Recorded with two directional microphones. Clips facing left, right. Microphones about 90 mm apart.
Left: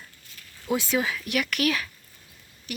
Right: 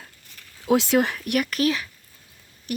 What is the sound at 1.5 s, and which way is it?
Speech, 30° right (ahead or behind).